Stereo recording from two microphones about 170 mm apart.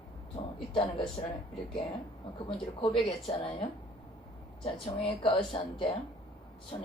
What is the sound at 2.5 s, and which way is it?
Speech, 30° left (ahead or behind).